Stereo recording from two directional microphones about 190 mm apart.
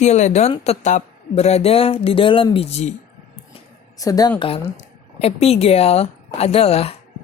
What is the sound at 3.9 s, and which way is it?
A woman's voice, 20° left (ahead or behind).